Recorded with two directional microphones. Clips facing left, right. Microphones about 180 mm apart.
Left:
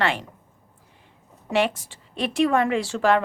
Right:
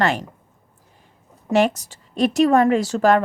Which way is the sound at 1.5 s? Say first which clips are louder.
Right 5 dB; 45° right (ahead or behind).